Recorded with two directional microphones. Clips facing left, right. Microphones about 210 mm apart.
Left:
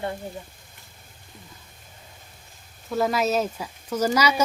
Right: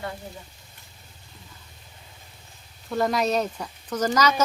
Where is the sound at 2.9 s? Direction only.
Centre (ahead or behind).